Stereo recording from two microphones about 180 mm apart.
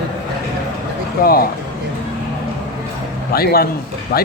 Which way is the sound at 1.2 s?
55° left (ahead or behind).